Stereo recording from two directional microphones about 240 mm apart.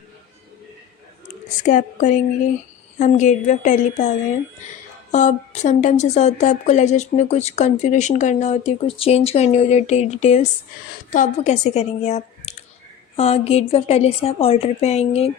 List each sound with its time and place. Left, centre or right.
1.6 s a woman's voice: left
5.1 s a woman's voice: left